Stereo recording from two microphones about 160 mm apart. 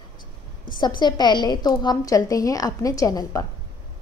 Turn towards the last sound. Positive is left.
turn(degrees=20)  # may be behind; listen again after turning